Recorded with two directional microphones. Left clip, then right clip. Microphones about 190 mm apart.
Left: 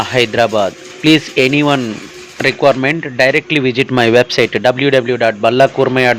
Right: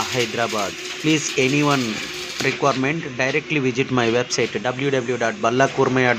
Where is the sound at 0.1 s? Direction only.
30° left (ahead or behind).